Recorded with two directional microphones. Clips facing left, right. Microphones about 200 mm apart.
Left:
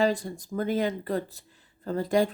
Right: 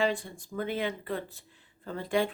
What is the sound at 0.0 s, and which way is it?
Speech, 40° left (ahead or behind).